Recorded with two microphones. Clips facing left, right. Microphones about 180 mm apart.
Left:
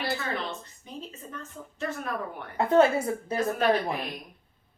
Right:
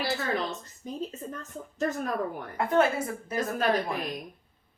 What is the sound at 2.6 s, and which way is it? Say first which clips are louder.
Speech: left 4 dB; 25° left (ahead or behind).